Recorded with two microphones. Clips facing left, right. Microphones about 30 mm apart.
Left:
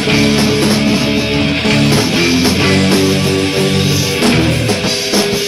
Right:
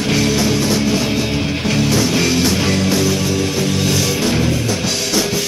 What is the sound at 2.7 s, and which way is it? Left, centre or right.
Music, left.